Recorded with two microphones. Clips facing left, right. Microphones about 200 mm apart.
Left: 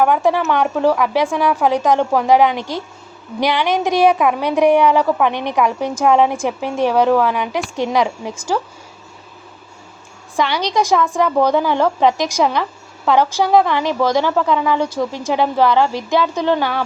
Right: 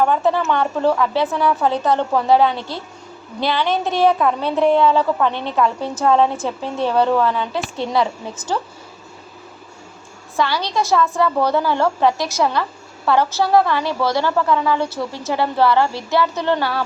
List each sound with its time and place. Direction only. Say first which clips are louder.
0.0 s a woman's voice: left 2 dB; 15° left (ahead or behind)
10.3 s a woman's voice: left 2 dB; 20° left (ahead or behind)